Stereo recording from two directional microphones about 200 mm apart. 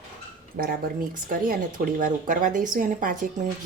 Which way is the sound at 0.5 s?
50° right (ahead or behind).